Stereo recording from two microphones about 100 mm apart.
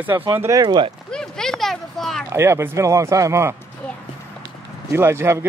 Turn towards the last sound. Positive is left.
turn(degrees=-25)  # may be behind; listen again after turning